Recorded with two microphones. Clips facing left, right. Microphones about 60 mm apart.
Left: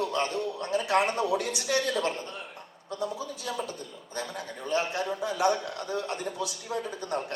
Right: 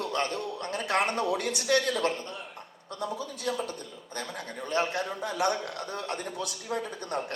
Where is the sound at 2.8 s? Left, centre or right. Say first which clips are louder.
Left 1 dB; right.